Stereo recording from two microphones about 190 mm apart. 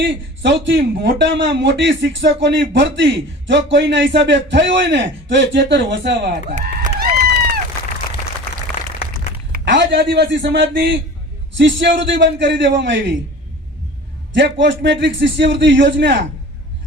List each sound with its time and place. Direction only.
0.0 s a man's voice: 65° right (ahead or behind)
6.5 s a sound: 45° right (ahead or behind)
9.5 s a man's voice: 70° right (ahead or behind)
14.3 s a man's voice: 70° right (ahead or behind)